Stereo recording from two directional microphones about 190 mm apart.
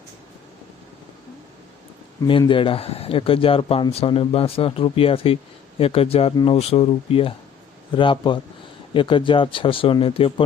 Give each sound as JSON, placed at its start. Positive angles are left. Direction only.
{"t": 2.4, "sound": "a man's voice", "side_deg": 25}